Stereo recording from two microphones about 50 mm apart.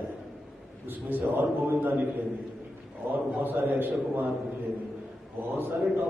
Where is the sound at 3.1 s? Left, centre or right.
Right.